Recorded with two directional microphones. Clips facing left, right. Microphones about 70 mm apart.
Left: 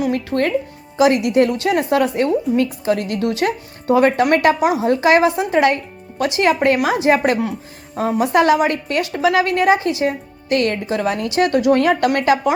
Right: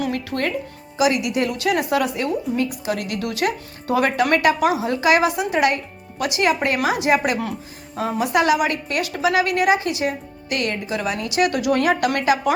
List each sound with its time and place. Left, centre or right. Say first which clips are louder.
0.1 s a woman's voice: left 5 dB; left
10.6 s a woman's voice: left 3 dB; left